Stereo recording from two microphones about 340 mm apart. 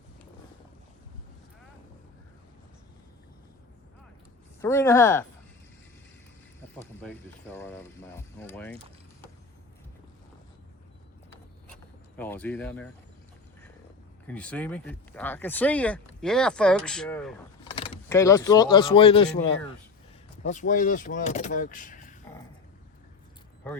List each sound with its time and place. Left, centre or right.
4.6 s speech: centre
6.7 s speech: centre
12.1 s speech: centre
14.3 s speech: centre
17.7 s speech: centre